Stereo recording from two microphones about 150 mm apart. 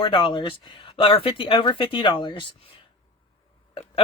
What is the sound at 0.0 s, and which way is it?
Speech, 35° left (ahead or behind).